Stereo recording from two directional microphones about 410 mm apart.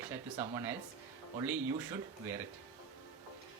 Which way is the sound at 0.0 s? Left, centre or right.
Centre.